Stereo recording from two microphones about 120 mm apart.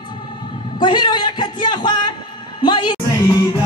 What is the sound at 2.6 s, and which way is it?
Music, 40° left (ahead or behind).